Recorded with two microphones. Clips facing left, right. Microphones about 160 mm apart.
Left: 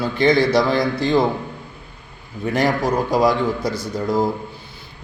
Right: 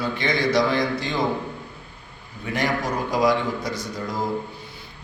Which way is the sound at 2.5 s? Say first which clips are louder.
Left 6 dB; 35° left (ahead or behind).